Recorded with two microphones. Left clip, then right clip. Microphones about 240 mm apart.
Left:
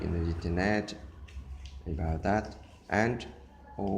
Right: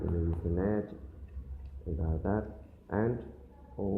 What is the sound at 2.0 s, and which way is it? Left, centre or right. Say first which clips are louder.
Speech: left 5 dB; left.